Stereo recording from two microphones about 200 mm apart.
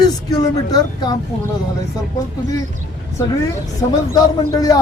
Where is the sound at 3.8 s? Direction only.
15° left (ahead or behind).